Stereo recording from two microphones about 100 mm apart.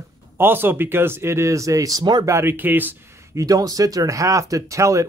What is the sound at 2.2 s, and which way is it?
Speech, 25° right (ahead or behind).